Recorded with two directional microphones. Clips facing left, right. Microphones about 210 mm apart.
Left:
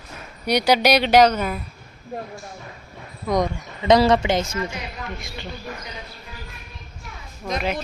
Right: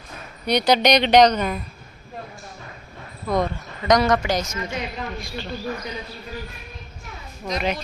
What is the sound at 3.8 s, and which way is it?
Speech, 30° left (ahead or behind).